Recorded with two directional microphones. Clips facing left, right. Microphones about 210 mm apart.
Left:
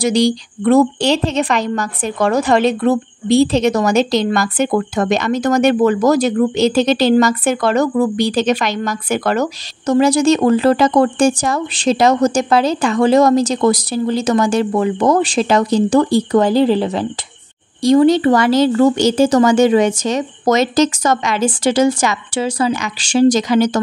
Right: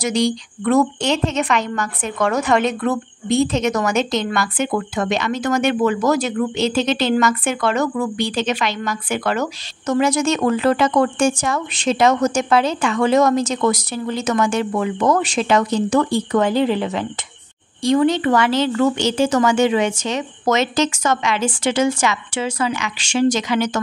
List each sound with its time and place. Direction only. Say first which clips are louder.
0.0 s a woman's voice: left 5 dB; 35° left (ahead or behind)